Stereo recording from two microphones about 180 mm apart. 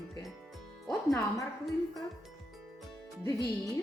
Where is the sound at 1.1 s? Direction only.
15° left (ahead or behind).